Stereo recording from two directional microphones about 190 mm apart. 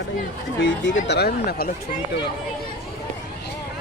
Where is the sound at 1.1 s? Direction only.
55° left (ahead or behind).